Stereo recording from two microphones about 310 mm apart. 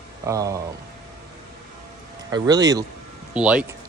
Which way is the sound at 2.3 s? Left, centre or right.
Centre.